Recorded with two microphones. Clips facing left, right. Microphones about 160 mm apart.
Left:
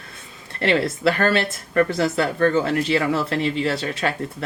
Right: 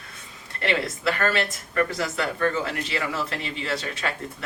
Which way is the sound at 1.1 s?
30° left (ahead or behind).